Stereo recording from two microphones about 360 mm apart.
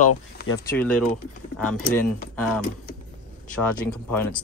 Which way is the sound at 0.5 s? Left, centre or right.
Centre.